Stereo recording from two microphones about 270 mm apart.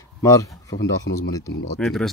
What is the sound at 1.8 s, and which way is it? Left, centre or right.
Speech, centre.